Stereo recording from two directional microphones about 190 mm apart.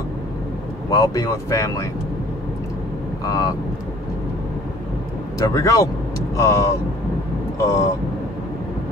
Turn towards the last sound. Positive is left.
turn(degrees=15)  # may be behind; listen again after turning